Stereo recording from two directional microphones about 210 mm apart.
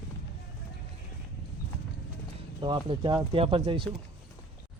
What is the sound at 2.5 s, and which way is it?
Speech, 20° right (ahead or behind).